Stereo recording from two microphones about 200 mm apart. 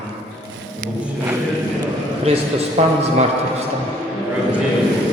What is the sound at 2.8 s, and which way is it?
Speech, 30° right (ahead or behind).